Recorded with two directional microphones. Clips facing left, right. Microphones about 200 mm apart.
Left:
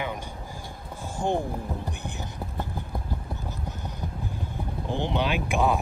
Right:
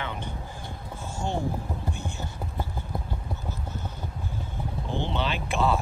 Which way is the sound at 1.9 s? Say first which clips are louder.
Right 1 dB; 15° left (ahead or behind).